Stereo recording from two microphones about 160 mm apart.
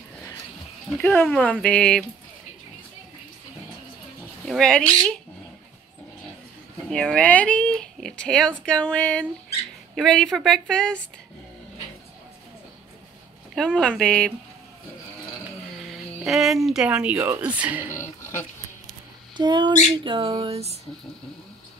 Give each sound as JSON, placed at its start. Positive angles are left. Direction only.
{"t": 0.8, "sound": "speech", "side_deg": 5}
{"t": 4.5, "sound": "speech", "side_deg": 5}
{"t": 6.9, "sound": "speech", "side_deg": 5}
{"t": 13.6, "sound": "speech", "side_deg": 5}
{"t": 15.9, "sound": "speech", "side_deg": 0}
{"t": 19.3, "sound": "a sound", "side_deg": -30}